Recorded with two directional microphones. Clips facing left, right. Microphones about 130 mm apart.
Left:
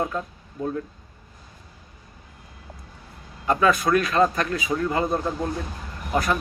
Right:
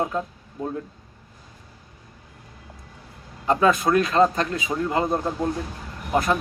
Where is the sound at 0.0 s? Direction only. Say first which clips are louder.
Right 2 dB; 20° right (ahead or behind).